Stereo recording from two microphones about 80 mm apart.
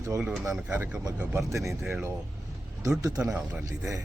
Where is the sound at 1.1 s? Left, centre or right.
Centre.